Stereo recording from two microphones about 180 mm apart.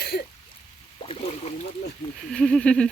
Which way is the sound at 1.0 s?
35° left (ahead or behind).